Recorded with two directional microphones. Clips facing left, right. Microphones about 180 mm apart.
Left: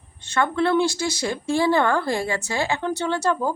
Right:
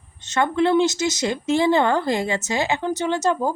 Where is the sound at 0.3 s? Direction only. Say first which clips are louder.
Right 2 dB; 20° right (ahead or behind).